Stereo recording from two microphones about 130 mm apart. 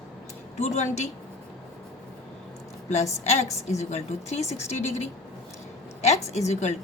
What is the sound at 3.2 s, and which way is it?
A woman's voice, 55° left (ahead or behind).